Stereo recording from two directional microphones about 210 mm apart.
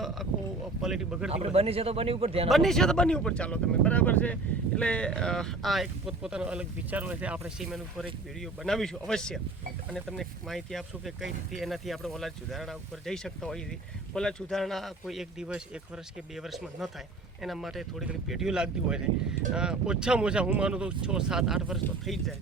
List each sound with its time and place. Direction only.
0.0 s a sound: centre (ahead or behind)
0.8 s speech: centre (ahead or behind)
1.3 s speech: 30° right (ahead or behind)
2.5 s speech: centre (ahead or behind)